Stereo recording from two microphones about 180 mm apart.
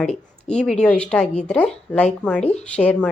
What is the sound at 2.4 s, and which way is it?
Speech, 35° left (ahead or behind).